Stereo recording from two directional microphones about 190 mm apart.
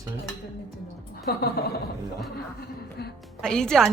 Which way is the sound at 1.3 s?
55° left (ahead or behind).